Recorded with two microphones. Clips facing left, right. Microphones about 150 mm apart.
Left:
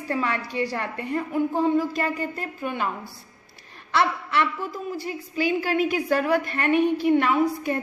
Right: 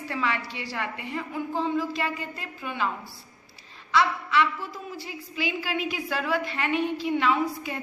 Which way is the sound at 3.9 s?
60° left (ahead or behind).